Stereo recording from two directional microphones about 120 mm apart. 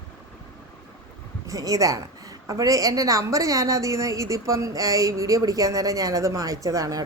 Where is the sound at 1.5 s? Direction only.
30° right (ahead or behind).